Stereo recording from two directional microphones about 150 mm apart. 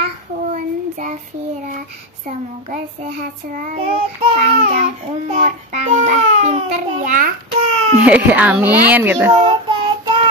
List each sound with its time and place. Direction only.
0.5 s child singing: 60° right (ahead or behind)
2.2 s speech: 55° right (ahead or behind)
8.0 s a child's voice: 10° right (ahead or behind)
9.3 s child singing: 35° right (ahead or behind)